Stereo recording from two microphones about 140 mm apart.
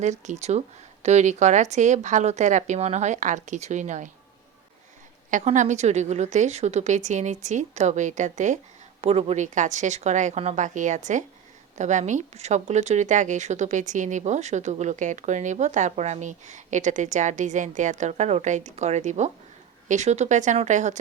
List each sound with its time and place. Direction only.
0.0 s speech: 55° right (ahead or behind)
5.3 s speech: 60° right (ahead or behind)
9.0 s speech: 45° right (ahead or behind)